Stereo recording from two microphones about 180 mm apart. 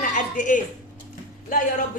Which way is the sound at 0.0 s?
45° left (ahead or behind).